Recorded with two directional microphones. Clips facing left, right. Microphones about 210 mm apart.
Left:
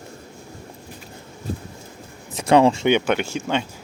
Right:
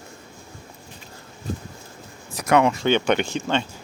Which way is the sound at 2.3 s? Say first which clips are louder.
Left 3 dB; 25° left (ahead or behind).